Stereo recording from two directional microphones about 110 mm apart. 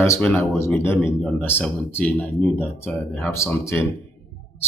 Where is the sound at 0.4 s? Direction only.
25° left (ahead or behind).